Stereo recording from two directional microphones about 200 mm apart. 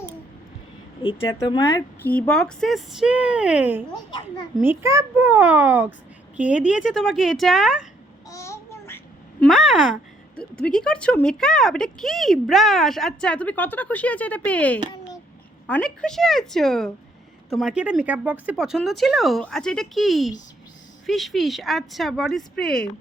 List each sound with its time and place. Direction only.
1.5 s speech: 25° left (ahead or behind)
2.0 s a child's voice: 5° left (ahead or behind)
8.3 s child singing: 15° left (ahead or behind)
9.4 s speech: centre (ahead or behind)